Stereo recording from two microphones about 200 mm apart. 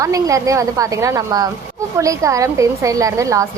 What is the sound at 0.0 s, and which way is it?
A woman's voice, 15° right (ahead or behind).